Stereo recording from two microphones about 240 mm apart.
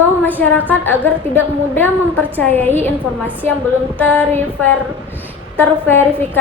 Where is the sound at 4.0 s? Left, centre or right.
Centre.